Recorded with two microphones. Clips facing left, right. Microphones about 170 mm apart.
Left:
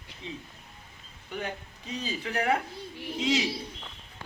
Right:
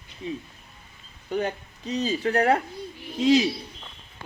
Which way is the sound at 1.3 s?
40° right (ahead or behind).